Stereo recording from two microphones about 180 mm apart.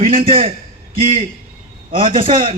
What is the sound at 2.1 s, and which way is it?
Speech, 30° right (ahead or behind).